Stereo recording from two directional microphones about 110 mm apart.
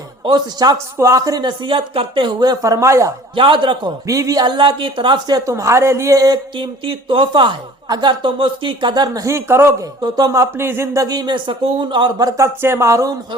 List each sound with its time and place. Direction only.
0.3 s speech: 40° right (ahead or behind)
2.4 s speech: 35° right (ahead or behind)
3.3 s a woman's voice: 50° right (ahead or behind)
4.0 s a woman's voice: 30° right (ahead or behind)
5.5 s speech: 30° right (ahead or behind)
6.6 s a woman's voice: 50° right (ahead or behind); by 9.7 s 25° right (ahead or behind)
10.0 s speech: 35° right (ahead or behind)
12.4 s speech: 25° right (ahead or behind)